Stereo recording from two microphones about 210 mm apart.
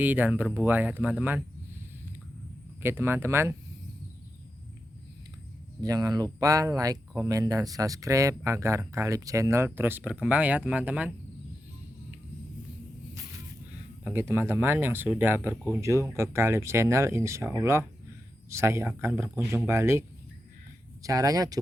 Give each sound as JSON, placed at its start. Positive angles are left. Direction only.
{"t": 0.0, "sound": "speech", "side_deg": -10}
{"t": 2.8, "sound": "speech", "side_deg": -10}
{"t": 5.8, "sound": "speech", "side_deg": -15}
{"t": 14.0, "sound": "speech", "side_deg": -10}